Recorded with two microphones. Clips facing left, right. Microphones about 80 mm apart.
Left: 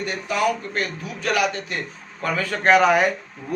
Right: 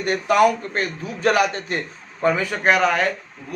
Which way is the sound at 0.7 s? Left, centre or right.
Right.